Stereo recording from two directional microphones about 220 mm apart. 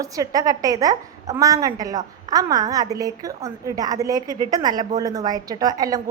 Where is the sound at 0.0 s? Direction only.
15° right (ahead or behind).